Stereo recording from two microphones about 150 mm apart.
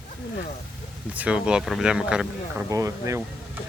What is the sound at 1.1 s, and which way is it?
Speech, 10° right (ahead or behind).